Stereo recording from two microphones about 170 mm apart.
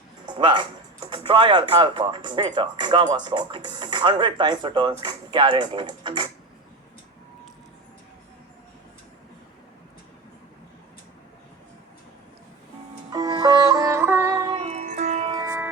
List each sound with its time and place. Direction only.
0.3 s speech: 30° right (ahead or behind)
13.1 s music: 20° right (ahead or behind)
14.7 s music: 45° right (ahead or behind)
15.3 s music: 20° right (ahead or behind)